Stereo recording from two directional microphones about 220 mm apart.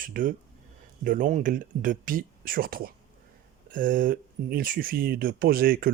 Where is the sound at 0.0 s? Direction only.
40° right (ahead or behind).